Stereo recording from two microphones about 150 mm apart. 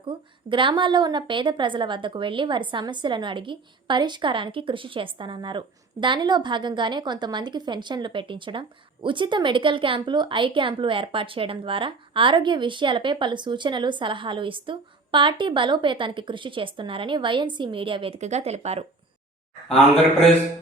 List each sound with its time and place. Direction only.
0.0 s a woman's voice: 35° right (ahead or behind)